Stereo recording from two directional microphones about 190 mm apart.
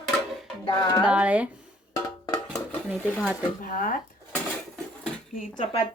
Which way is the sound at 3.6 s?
50° left (ahead or behind).